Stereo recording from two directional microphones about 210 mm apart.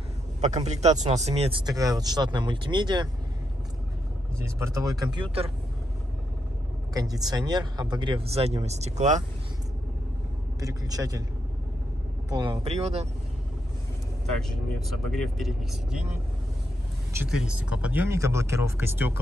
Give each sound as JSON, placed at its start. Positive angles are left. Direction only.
{"t": 0.4, "sound": "speech", "side_deg": -35}
{"t": 1.7, "sound": "speech", "side_deg": -15}
{"t": 4.7, "sound": "speech", "side_deg": -15}
{"t": 6.9, "sound": "speech", "side_deg": -15}
{"t": 10.6, "sound": "speech", "side_deg": -15}
{"t": 12.3, "sound": "speech", "side_deg": -20}
{"t": 15.0, "sound": "speech", "side_deg": 0}
{"t": 17.1, "sound": "speech", "side_deg": -5}